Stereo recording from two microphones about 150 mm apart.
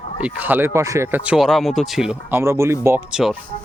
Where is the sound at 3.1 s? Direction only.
5° right (ahead or behind).